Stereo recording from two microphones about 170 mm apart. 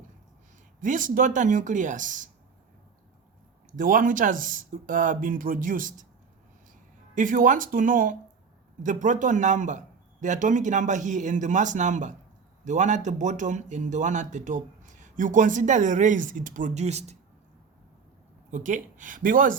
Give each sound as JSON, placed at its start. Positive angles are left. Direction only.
{"t": 0.8, "sound": "speech", "side_deg": -50}
{"t": 3.7, "sound": "speech", "side_deg": -50}
{"t": 7.2, "sound": "speech", "side_deg": -50}
{"t": 18.5, "sound": "speech", "side_deg": -45}